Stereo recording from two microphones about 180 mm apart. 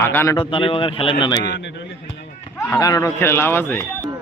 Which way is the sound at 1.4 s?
70° left (ahead or behind).